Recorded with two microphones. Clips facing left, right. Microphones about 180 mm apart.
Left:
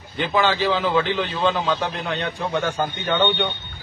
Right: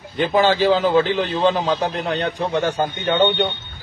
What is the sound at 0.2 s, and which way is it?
A man's voice, 40° right (ahead or behind).